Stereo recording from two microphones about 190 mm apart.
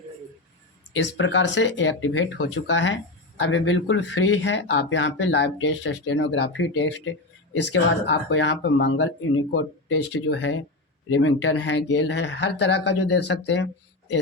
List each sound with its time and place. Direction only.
0.9 s speech: 70° left (ahead or behind)
9.9 s speech: 75° left (ahead or behind)
11.1 s speech: 90° left; by 13.7 s 65° left (ahead or behind)